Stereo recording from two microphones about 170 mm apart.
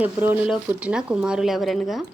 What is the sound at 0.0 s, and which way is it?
A woman's voice, 10° right (ahead or behind).